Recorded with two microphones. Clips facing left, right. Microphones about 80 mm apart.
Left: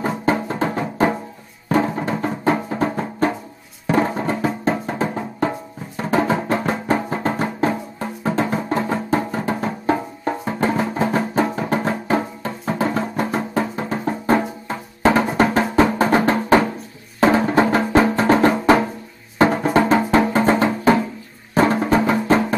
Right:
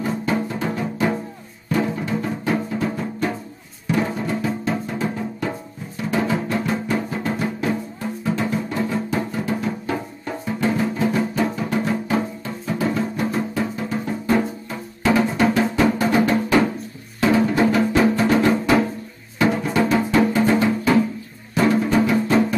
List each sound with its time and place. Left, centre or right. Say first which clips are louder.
0.0 s music: left 2 dB; left
19.8 s music: left 1 dB; left
20.1 s music: left 1 dB; left